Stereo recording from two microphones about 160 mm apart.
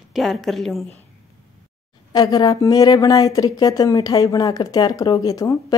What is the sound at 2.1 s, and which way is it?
Speech, 25° left (ahead or behind).